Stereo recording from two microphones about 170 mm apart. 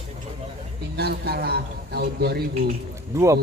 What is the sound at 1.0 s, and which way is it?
Speech, 70° right (ahead or behind).